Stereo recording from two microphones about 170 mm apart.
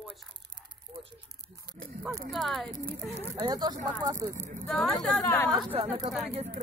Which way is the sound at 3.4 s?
25° right (ahead or behind).